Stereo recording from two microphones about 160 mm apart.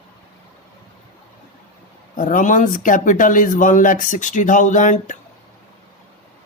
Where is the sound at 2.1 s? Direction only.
55° left (ahead or behind).